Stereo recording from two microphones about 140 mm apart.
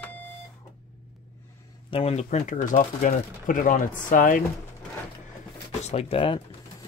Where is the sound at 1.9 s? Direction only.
50° left (ahead or behind); by 4.4 s 75° left (ahead or behind).